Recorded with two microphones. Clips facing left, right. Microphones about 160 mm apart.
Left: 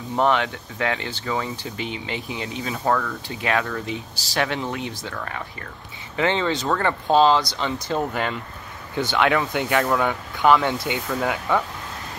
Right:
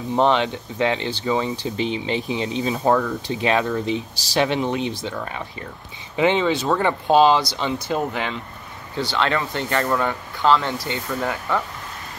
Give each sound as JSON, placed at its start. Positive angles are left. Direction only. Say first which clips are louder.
{"t": 0.1, "sound": "speech", "louder": "right 2 dB", "side_deg": -20}
{"t": 8.0, "sound": "speech", "louder": "even", "side_deg": 0}
{"t": 8.9, "sound": "speech", "louder": "left 2 dB", "side_deg": 15}
{"t": 11.1, "sound": "speech", "louder": "left 1 dB", "side_deg": 5}